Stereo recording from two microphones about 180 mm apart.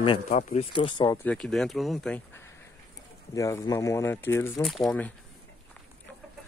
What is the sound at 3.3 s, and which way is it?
Speech, 20° left (ahead or behind).